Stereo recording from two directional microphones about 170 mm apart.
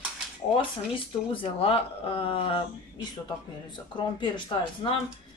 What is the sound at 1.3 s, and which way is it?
Speech, 35° left (ahead or behind).